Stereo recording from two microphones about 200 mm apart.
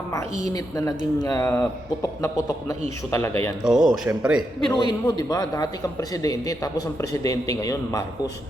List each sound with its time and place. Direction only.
0.1 s speech: 15° left (ahead or behind)
3.7 s a man's voice: centre (ahead or behind)
4.7 s speech: 20° left (ahead or behind)